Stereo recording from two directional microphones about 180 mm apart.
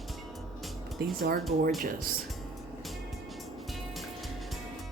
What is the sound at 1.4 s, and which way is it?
Speech, centre (ahead or behind).